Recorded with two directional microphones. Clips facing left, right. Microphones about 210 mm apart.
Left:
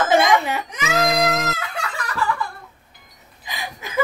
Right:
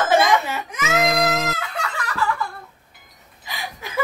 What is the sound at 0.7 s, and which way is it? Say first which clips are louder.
Baby cry: even; centre (ahead or behind).